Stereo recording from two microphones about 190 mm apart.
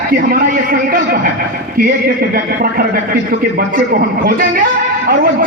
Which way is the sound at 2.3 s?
50° right (ahead or behind).